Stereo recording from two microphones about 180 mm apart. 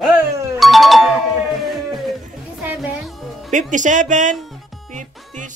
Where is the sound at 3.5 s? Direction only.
45° right (ahead or behind).